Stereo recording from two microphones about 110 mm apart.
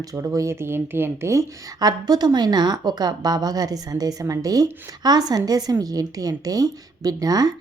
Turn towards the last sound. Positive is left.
turn(degrees=-35)  # may be behind; listen again after turning